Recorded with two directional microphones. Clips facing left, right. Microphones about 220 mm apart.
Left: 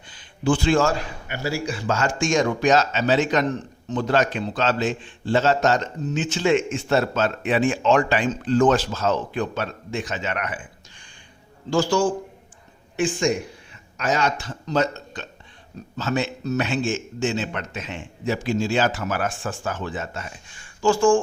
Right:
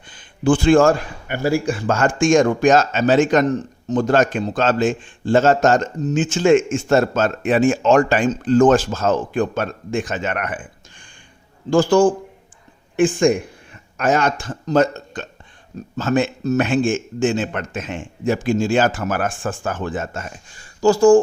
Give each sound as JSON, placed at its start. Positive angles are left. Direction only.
{"t": 0.1, "sound": "a man's voice", "side_deg": -50}